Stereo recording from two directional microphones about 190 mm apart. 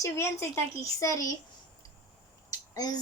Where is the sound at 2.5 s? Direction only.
20° left (ahead or behind).